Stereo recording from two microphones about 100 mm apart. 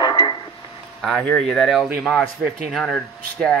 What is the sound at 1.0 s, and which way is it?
Speech, 5° left (ahead or behind).